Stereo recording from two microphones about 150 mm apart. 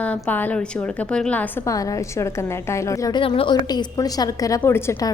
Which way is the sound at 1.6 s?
20° left (ahead or behind).